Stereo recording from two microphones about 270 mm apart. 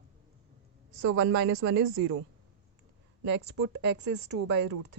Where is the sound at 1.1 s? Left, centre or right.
Right.